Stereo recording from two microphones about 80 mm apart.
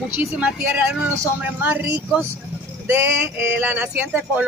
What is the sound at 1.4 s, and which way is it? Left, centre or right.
Speech, right.